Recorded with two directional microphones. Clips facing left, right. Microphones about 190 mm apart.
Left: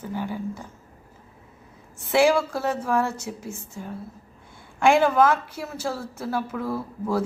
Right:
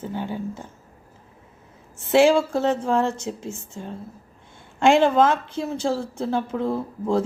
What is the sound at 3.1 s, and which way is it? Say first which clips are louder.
Speech: right 4 dB; 10° left (ahead or behind).